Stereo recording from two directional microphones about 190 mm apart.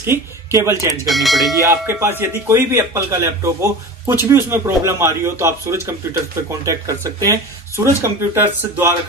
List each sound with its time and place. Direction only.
0.0 s speech: 15° right (ahead or behind)
1.0 s speech: centre (ahead or behind)
1.6 s speech: 15° right (ahead or behind)